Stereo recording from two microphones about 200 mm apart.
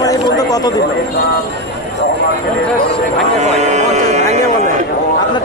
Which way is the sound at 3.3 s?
35° right (ahead or behind).